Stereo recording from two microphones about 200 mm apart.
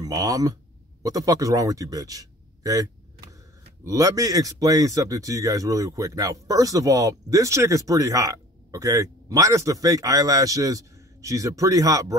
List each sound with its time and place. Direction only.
0.0 s a man's voice: 20° right (ahead or behind)